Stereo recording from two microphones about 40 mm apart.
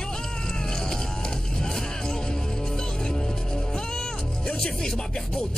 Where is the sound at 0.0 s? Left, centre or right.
Centre.